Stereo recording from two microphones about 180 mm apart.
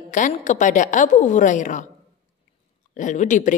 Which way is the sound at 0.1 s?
45° left (ahead or behind).